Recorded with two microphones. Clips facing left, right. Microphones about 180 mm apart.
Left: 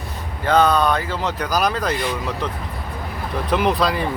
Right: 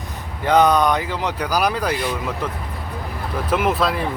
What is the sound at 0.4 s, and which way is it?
Speech, 15° right (ahead or behind).